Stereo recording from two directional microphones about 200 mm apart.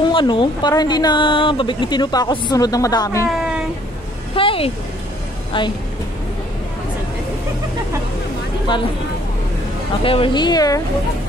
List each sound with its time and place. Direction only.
0.1 s speech: 25° left (ahead or behind)
3.3 s a sound: 5° right (ahead or behind)
4.4 s speech: 25° left (ahead or behind)
10.0 s speech: 25° left (ahead or behind)